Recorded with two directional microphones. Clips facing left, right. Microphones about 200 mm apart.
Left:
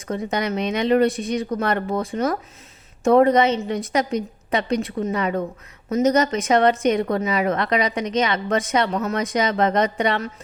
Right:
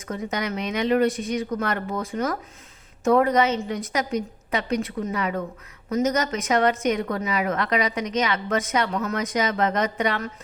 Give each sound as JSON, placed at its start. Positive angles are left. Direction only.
{"t": 0.1, "sound": "a woman's voice", "side_deg": 30}